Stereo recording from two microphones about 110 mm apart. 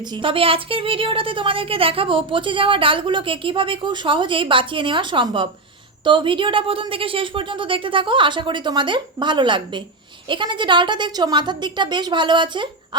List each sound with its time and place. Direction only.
0.1 s a woman's voice: 50° right (ahead or behind)